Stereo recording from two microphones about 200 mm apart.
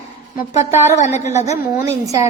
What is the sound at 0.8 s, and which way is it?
Speech, 35° left (ahead or behind).